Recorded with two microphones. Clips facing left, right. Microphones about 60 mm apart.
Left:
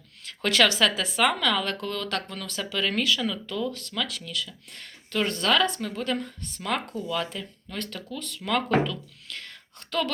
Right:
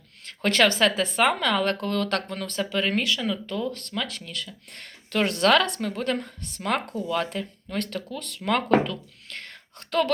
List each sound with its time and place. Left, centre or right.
0.3 s speech: right
3.4 s speech: right
3.7 s a woman's voice: right
3.9 s speech: right
5.9 s a woman's voice: right